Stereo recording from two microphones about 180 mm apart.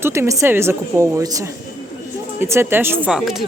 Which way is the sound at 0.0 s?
15° right (ahead or behind).